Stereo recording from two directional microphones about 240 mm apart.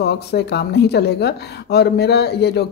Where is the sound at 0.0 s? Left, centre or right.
Left.